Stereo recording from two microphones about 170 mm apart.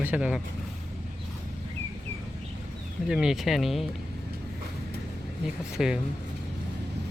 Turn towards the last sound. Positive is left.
turn(degrees=0)  # may be behind; listen again after turning